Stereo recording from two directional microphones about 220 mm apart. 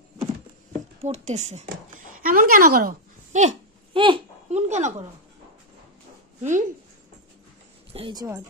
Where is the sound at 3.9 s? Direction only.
25° right (ahead or behind).